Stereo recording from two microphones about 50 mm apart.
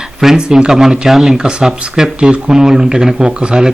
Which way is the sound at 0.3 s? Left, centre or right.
Centre.